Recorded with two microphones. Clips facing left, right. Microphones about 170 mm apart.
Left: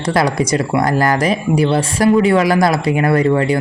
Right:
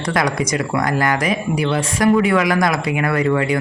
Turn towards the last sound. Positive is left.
turn(degrees=35)  # may be behind; listen again after turning